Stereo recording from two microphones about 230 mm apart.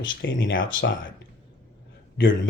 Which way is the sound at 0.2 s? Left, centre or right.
Left.